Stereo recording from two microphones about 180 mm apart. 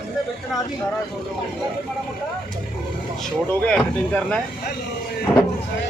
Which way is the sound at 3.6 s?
5° left (ahead or behind).